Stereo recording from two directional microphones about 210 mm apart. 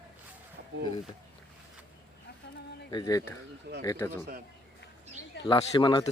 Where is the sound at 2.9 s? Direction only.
15° left (ahead or behind).